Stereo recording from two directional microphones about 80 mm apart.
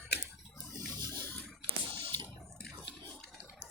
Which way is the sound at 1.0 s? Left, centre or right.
Left.